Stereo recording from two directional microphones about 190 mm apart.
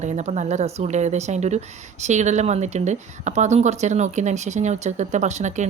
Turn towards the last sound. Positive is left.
turn(degrees=-40)  # may be behind; listen again after turning